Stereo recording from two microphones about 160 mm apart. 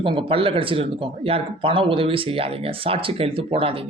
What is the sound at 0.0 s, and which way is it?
Speech, 30° right (ahead or behind).